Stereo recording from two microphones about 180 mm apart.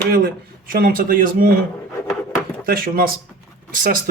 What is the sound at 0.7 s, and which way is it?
Speech, 50° right (ahead or behind).